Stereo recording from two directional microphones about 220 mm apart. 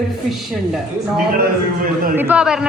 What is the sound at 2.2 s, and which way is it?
Speech, 5° right (ahead or behind).